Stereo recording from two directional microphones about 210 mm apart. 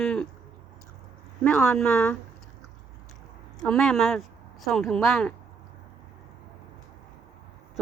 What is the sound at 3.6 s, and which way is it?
A woman's voice, centre (ahead or behind).